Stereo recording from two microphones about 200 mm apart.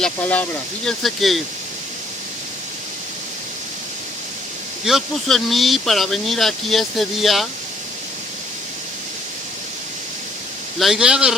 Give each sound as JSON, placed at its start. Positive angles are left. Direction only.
{"t": 0.0, "sound": "speech", "side_deg": 5}
{"t": 4.9, "sound": "speech", "side_deg": 0}
{"t": 10.8, "sound": "speech", "side_deg": 0}